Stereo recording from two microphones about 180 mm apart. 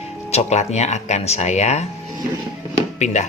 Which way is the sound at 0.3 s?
35° left (ahead or behind).